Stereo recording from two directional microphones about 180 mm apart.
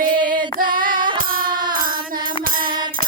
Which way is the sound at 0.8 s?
50° right (ahead or behind).